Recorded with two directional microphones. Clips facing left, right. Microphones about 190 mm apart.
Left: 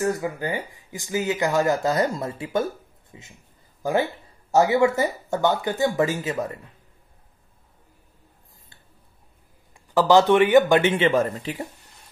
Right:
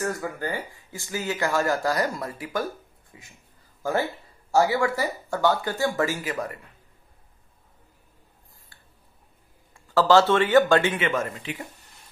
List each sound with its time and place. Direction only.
0.0 s speech: 15° left (ahead or behind)
9.8 s speech: 15° left (ahead or behind); by 11.6 s 35° left (ahead or behind)